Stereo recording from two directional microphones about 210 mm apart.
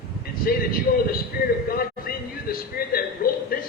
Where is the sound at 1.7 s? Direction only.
45° left (ahead or behind).